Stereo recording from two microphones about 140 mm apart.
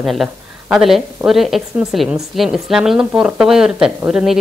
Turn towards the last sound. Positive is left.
turn(degrees=-5)  # may be behind; listen again after turning